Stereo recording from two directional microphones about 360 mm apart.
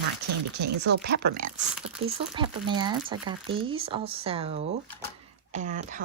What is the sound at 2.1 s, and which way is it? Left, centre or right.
A woman's voice, centre.